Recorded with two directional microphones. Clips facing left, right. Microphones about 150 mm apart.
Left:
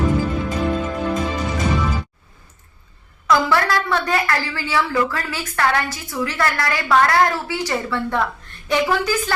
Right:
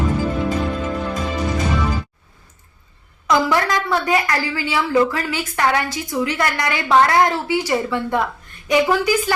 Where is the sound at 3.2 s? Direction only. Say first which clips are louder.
Even; 15° right (ahead or behind).